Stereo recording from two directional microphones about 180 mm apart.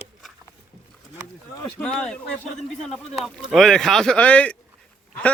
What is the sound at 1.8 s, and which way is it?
Speech, 5° left (ahead or behind).